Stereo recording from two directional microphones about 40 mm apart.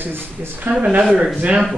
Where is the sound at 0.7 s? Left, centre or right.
Centre.